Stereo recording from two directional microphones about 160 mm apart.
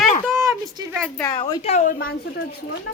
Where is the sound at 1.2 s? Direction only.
25° left (ahead or behind).